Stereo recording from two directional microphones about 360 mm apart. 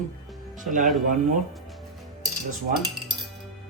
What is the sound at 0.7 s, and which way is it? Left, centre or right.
Speech, right.